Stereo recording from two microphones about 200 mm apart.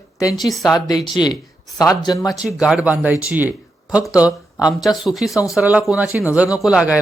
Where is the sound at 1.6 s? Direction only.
Centre (ahead or behind).